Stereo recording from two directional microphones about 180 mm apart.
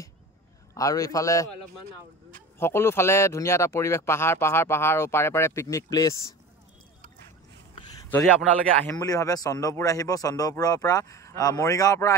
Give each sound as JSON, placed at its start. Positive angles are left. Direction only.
{"t": 0.7, "sound": "speech", "side_deg": 20}
{"t": 2.6, "sound": "speech", "side_deg": 15}
{"t": 7.7, "sound": "a sound", "side_deg": 25}
{"t": 8.8, "sound": "a man's voice", "side_deg": 20}